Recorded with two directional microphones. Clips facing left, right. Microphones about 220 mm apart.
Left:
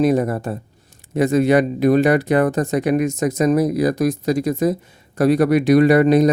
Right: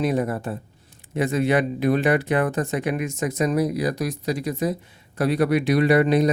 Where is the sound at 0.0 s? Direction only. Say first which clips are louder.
Left 6 dB; 45° left (ahead or behind).